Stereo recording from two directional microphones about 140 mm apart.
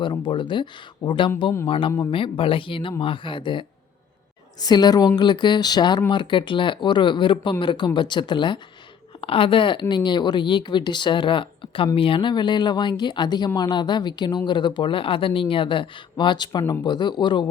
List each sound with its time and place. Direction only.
0.0 s speech: 35° left (ahead or behind)